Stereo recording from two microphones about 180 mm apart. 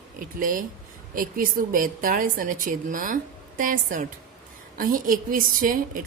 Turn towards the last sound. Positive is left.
turn(degrees=-50)  # may be behind; listen again after turning